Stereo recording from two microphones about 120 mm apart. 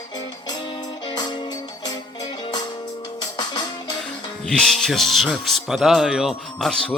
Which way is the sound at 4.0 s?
5° left (ahead or behind).